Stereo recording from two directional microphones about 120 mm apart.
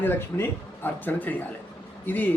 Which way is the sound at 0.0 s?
15° left (ahead or behind).